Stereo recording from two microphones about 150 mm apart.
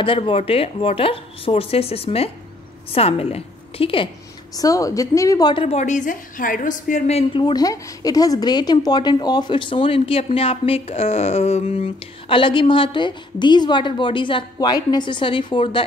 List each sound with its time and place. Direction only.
0.0 s a woman's voice: 35° left (ahead or behind)
4.6 s a woman's voice: 25° left (ahead or behind); by 7.2 s 60° left (ahead or behind)
7.2 s a woman's voice: 30° left (ahead or behind)